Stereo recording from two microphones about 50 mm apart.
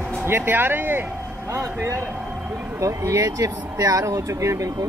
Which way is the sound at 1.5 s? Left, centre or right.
Right.